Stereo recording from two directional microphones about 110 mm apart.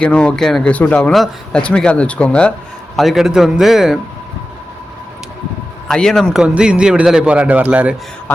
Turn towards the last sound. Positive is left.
turn(degrees=-15)  # may be behind; listen again after turning